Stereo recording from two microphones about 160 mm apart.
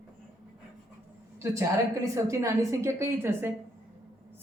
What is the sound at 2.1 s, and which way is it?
A woman's voice, 20° right (ahead or behind).